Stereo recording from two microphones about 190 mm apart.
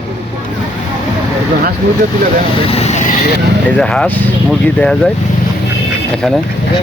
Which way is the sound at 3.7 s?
5° left (ahead or behind).